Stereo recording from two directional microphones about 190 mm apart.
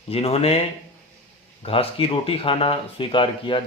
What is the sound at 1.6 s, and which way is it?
Speech, 30° left (ahead or behind).